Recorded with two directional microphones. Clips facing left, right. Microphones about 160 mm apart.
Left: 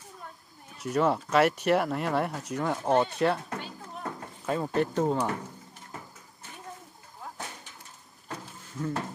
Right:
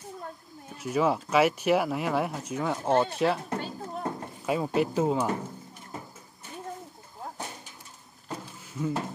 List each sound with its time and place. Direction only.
0.7 s speech: centre (ahead or behind)
3.4 s a sound: 35° right (ahead or behind)
4.5 s speech: 10° right (ahead or behind)
8.7 s speech: 10° right (ahead or behind)